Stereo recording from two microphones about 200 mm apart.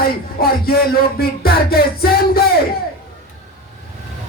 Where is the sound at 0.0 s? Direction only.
50° left (ahead or behind).